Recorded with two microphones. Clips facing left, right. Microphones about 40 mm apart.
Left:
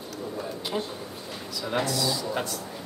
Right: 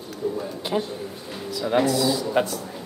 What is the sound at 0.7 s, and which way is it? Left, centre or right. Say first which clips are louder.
Speech: right 8 dB; centre.